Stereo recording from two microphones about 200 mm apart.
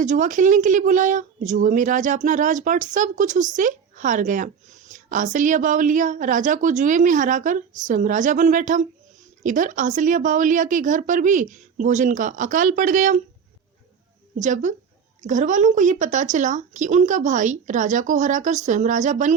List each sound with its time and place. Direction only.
0.0 s speech: 40° right (ahead or behind)
14.3 s speech: 40° right (ahead or behind)